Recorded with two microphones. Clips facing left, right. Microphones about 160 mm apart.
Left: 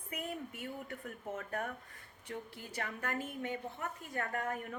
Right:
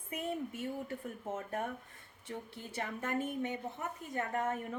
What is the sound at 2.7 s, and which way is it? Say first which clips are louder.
A woman's voice: right 3 dB; 25° right (ahead or behind).